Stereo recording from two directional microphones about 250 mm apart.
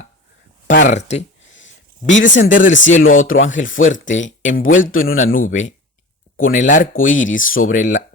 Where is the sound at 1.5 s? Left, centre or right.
Left.